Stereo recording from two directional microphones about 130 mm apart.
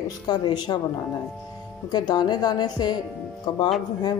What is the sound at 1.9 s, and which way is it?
Speech, 30° left (ahead or behind).